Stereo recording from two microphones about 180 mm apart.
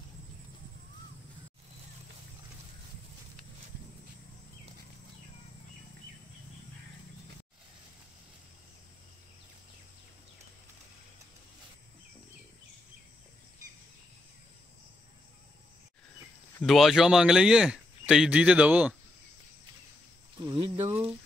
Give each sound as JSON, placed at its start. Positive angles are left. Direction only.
{"t": 16.6, "sound": "speech", "side_deg": 0}
{"t": 20.4, "sound": "speech", "side_deg": -20}